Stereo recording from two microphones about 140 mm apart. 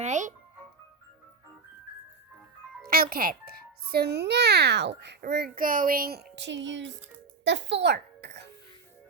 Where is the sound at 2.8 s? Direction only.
90° right.